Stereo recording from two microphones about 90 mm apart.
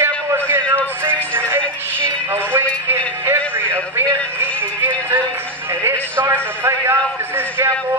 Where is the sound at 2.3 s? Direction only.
25° right (ahead or behind).